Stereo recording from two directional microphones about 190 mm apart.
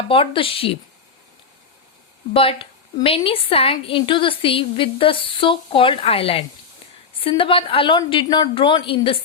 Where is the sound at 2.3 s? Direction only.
30° left (ahead or behind).